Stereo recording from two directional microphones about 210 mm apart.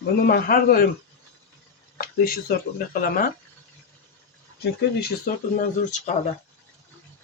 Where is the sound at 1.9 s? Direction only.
45° left (ahead or behind).